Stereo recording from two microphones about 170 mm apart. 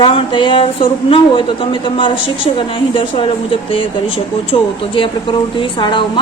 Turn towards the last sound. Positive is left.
turn(degrees=30)  # may be behind; listen again after turning